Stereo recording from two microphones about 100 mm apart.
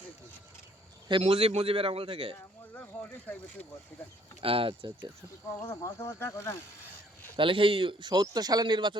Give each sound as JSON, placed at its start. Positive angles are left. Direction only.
{"t": 1.2, "sound": "a man's voice", "side_deg": -75}
{"t": 2.7, "sound": "speech", "side_deg": 20}
{"t": 4.4, "sound": "speech", "side_deg": -70}
{"t": 5.5, "sound": "speech", "side_deg": 30}
{"t": 7.3, "sound": "speech", "side_deg": -60}